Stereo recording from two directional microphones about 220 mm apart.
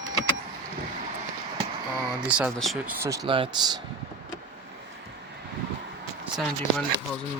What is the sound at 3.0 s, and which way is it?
Speech, 15° right (ahead or behind).